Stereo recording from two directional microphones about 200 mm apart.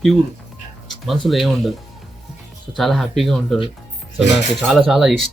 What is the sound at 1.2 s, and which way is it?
Speech, centre (ahead or behind).